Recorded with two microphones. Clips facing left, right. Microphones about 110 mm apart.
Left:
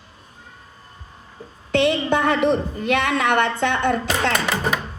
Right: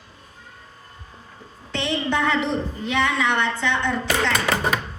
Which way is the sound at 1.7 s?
55° left (ahead or behind).